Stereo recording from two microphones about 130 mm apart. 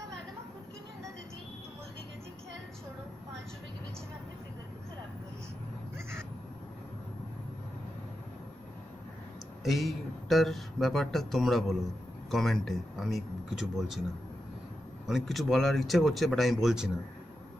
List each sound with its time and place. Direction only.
5.9 s crow: 20° right (ahead or behind)
9.7 s speech: centre (ahead or behind)
15.0 s speech: centre (ahead or behind)